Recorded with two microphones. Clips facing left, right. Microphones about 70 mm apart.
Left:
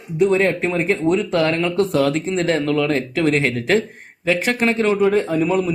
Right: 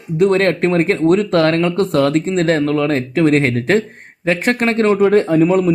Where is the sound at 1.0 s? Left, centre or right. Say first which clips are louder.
Right 5 dB; right.